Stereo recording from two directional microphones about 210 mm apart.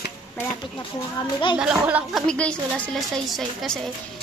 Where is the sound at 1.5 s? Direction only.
5° right (ahead or behind).